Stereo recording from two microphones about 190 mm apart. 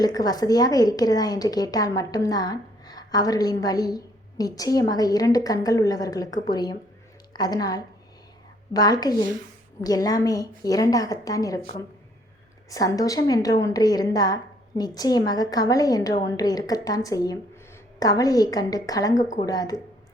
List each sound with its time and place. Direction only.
0.0 s a woman's voice: 20° left (ahead or behind)
12.7 s a woman's voice: 20° left (ahead or behind)